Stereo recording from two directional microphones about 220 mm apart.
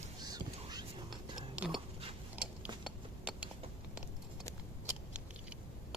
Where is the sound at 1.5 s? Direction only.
5° right (ahead or behind).